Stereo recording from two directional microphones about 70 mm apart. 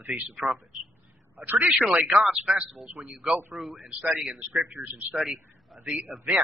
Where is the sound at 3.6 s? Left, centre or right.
Centre.